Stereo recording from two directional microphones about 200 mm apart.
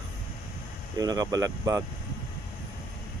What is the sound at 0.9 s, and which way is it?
Speech, 20° right (ahead or behind).